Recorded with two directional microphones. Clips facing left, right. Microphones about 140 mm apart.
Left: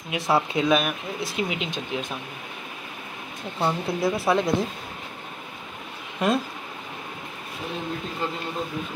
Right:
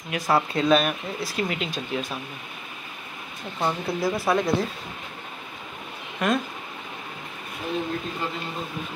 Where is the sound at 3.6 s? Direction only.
Centre (ahead or behind).